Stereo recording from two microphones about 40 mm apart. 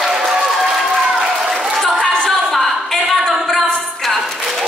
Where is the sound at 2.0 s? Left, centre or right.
Centre.